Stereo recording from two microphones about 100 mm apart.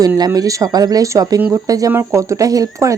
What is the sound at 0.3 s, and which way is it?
Speech, 40° right (ahead or behind).